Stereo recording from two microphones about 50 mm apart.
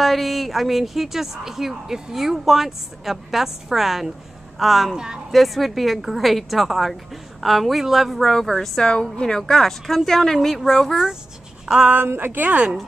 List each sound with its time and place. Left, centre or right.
0.0 s speech: centre
4.9 s speech: centre
5.3 s speech: centre
11.6 s speech: centre
12.1 s a woman's voice: right
12.4 s a woman's voice: right